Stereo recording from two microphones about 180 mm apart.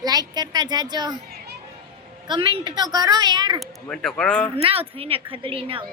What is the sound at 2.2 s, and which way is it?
A woman's voice, 25° right (ahead or behind).